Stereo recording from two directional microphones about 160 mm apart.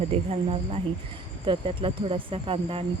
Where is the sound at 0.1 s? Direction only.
40° right (ahead or behind).